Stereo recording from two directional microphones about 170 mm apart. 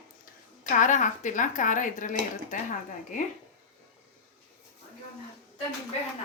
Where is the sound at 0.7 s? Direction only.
45° left (ahead or behind).